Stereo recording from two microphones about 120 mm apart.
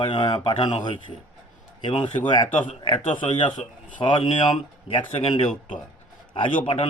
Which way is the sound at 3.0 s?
90° left.